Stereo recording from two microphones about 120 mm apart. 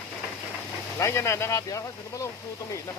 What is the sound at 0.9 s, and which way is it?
Speech, 25° left (ahead or behind).